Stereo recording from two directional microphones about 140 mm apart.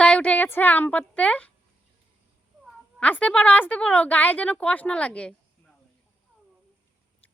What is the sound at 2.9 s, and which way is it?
A woman's voice, 10° left (ahead or behind).